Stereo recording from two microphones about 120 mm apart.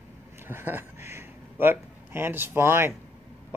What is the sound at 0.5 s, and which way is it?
A man's voice, 20° right (ahead or behind).